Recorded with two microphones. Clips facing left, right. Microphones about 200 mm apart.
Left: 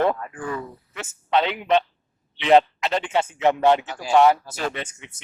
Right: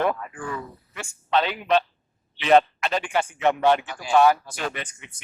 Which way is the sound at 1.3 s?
20° left (ahead or behind).